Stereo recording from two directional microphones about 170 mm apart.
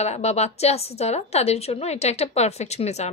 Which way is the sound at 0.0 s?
40° left (ahead or behind).